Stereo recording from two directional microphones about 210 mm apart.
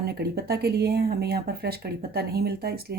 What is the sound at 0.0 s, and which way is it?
Speech, 50° right (ahead or behind).